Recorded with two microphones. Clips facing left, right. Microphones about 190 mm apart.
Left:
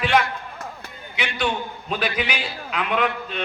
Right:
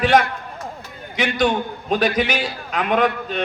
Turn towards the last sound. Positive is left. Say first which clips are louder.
# right 5 dB
turn(degrees=-40)  # may be behind; listen again after turning